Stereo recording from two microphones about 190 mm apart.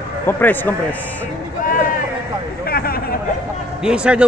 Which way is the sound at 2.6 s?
50° left (ahead or behind).